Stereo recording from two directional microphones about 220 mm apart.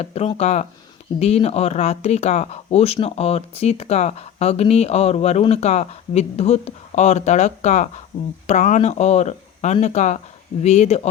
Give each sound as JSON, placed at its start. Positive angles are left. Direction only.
{"t": 0.0, "sound": "speech", "side_deg": 25}